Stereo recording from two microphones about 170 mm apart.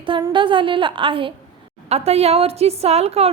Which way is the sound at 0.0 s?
25° right (ahead or behind).